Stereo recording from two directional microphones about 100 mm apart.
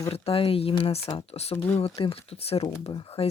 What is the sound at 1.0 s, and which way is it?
Speech, 80° left.